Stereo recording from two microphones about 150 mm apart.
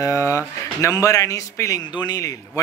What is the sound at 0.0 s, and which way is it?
A man's voice, 20° left (ahead or behind).